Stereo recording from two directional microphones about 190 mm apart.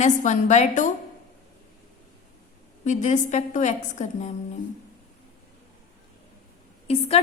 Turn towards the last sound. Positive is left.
turn(degrees=30)  # may be behind; listen again after turning